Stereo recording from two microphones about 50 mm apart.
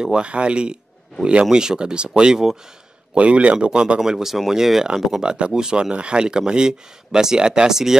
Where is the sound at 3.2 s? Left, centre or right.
Right.